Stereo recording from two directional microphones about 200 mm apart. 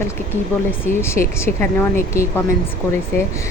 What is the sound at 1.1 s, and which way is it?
A woman's voice, 15° left (ahead or behind).